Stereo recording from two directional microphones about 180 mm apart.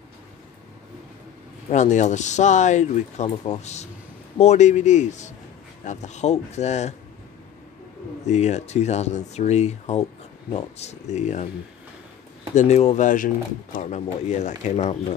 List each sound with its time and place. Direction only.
1.7 s speech: 40° left (ahead or behind)
8.3 s speech: 40° left (ahead or behind)
12.5 s speech: 35° left (ahead or behind)